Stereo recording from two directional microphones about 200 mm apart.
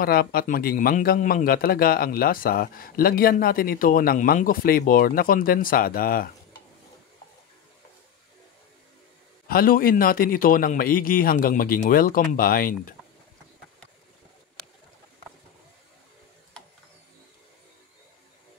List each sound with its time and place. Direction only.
0.0 s a man's voice: 50° left (ahead or behind)
9.5 s a man's voice: 45° left (ahead or behind)